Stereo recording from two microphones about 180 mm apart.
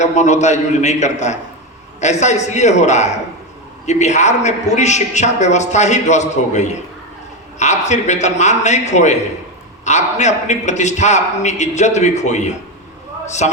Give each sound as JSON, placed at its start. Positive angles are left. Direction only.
{"t": 0.0, "sound": "a woman's voice", "side_deg": 40}